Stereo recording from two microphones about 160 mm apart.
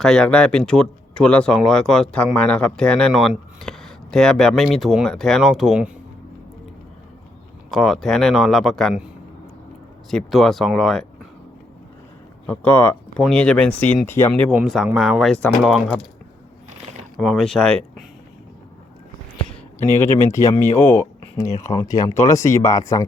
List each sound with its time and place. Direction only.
0.0 s speech: 5° left (ahead or behind)
7.7 s speech: centre (ahead or behind)
10.1 s speech: centre (ahead or behind)
12.5 s speech: 10° left (ahead or behind)
14.5 s speech: centre (ahead or behind)
17.2 s speech: centre (ahead or behind)
19.9 s speech: 15° left (ahead or behind)